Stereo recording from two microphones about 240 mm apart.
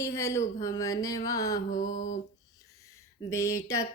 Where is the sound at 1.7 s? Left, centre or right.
Left.